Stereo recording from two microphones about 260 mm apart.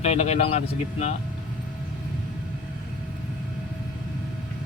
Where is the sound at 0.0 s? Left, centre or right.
Left.